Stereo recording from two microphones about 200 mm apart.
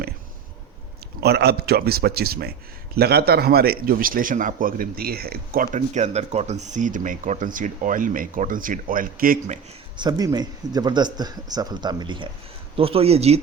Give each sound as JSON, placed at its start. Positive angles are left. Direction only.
{"t": 1.2, "sound": "speech", "side_deg": -55}
{"t": 10.0, "sound": "a man's voice", "side_deg": -20}